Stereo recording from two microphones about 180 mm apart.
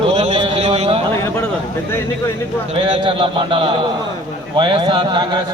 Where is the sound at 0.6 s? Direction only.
40° right (ahead or behind).